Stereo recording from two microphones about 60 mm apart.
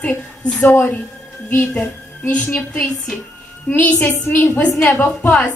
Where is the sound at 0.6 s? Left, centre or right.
Left.